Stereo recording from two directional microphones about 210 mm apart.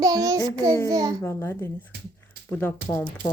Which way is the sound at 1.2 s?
10° left (ahead or behind).